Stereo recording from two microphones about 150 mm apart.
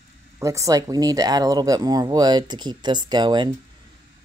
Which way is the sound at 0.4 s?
20° right (ahead or behind).